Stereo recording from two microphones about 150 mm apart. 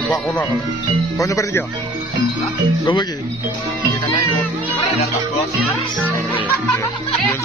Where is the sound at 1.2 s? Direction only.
20° left (ahead or behind).